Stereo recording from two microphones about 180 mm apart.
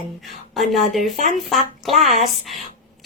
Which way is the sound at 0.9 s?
45° right (ahead or behind).